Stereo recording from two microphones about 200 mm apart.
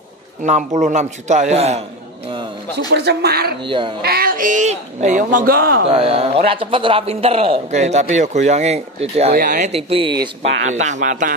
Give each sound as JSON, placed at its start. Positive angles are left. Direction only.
{"t": 0.4, "sound": "a man's voice", "side_deg": -35}
{"t": 2.9, "sound": "speech", "side_deg": -55}
{"t": 3.6, "sound": "speech", "side_deg": -25}
{"t": 4.0, "sound": "speech", "side_deg": -50}
{"t": 5.9, "sound": "a man's voice", "side_deg": -30}
{"t": 9.3, "sound": "speech", "side_deg": -45}
{"t": 9.7, "sound": "speech", "side_deg": -30}
{"t": 10.6, "sound": "a man's voice", "side_deg": -35}